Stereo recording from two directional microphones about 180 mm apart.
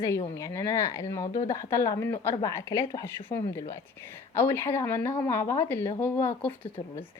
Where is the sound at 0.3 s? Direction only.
15° left (ahead or behind).